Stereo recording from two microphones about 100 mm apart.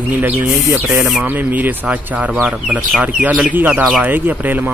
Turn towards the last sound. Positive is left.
turn(degrees=-20)  # may be behind; listen again after turning